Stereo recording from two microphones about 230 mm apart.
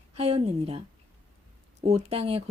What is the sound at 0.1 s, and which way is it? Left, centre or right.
Speech, right.